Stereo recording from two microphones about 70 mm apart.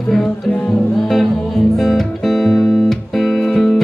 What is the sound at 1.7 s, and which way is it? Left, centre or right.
Music, centre.